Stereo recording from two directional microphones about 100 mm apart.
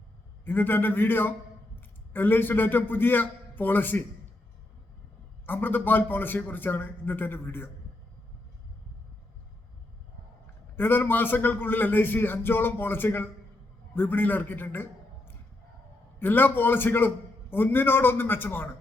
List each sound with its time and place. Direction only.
0.4 s a man's voice: 20° left (ahead or behind)
5.5 s a man's voice: 20° left (ahead or behind)
10.8 s a man's voice: 20° left (ahead or behind)